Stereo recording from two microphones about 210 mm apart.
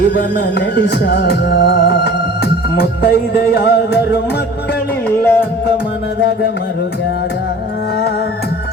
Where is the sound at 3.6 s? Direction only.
50° left (ahead or behind).